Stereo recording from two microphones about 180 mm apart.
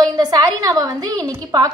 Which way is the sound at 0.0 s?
20° right (ahead or behind).